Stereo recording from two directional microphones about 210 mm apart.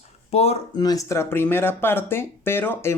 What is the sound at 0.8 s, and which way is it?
Speech, 15° left (ahead or behind).